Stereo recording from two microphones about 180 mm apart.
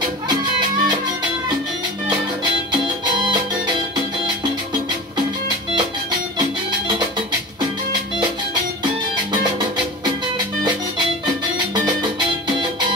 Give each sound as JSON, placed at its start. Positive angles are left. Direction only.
{"t": 0.3, "sound": "music", "side_deg": -25}
{"t": 2.0, "sound": "music", "side_deg": -25}
{"t": 8.8, "sound": "music", "side_deg": -25}
{"t": 11.7, "sound": "music", "side_deg": -25}